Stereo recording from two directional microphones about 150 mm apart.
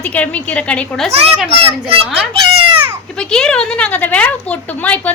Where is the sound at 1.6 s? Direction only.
40° right (ahead or behind).